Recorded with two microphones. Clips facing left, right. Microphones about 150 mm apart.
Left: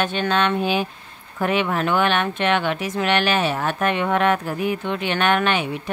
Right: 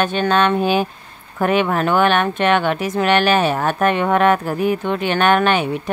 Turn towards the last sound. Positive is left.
turn(degrees=-45)  # may be behind; listen again after turning